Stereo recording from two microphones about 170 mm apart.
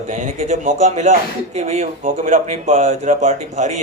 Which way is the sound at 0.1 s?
45° right (ahead or behind).